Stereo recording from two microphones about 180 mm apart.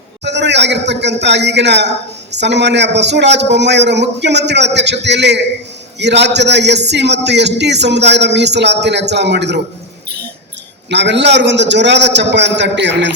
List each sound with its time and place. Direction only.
0.3 s a man's voice: 75° right (ahead or behind)
10.8 s a man's voice: 75° right (ahead or behind)